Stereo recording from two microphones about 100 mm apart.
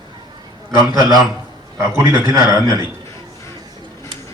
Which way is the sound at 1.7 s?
30° right (ahead or behind).